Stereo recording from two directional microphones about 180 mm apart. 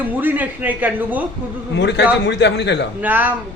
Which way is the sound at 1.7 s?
75° left (ahead or behind).